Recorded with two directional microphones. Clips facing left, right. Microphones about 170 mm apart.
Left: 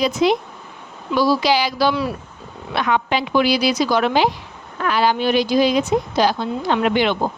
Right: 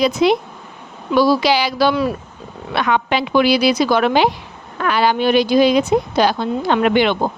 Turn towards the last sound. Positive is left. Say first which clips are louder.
# right 3 dB
turn(degrees=-65)  # may be behind; listen again after turning